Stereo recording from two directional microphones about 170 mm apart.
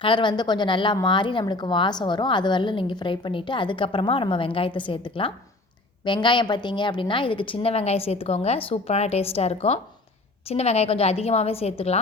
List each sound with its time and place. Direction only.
0.0 s a woman's voice: 30° left (ahead or behind)